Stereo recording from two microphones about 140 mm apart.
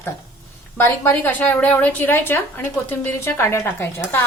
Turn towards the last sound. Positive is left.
turn(degrees=20)  # may be behind; listen again after turning